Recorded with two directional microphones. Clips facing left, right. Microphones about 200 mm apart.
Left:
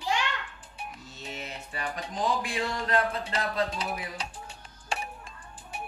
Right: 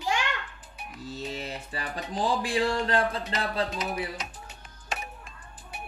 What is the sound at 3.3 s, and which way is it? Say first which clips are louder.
Speech: even; 30° left (ahead or behind).